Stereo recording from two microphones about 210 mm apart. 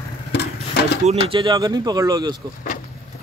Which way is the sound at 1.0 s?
25° right (ahead or behind).